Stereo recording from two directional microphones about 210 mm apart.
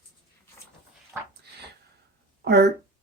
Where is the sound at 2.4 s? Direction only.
50° right (ahead or behind).